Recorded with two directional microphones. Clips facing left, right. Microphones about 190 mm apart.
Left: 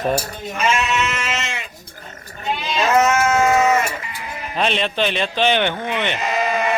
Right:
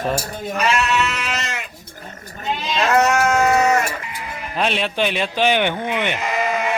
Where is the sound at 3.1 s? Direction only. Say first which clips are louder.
Even; 40° right (ahead or behind).